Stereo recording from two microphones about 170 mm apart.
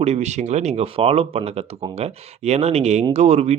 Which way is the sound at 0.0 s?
40° right (ahead or behind).